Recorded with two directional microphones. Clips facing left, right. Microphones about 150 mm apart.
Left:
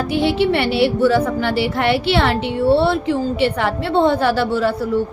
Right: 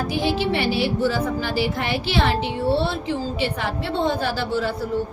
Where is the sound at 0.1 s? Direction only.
65° left (ahead or behind).